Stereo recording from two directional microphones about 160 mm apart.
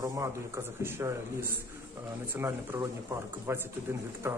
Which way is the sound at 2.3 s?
15° right (ahead or behind).